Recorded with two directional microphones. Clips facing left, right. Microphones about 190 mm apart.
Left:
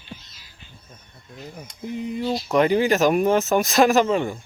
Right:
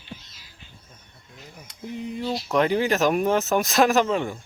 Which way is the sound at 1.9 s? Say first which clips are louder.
Left 3 dB; 5° left (ahead or behind).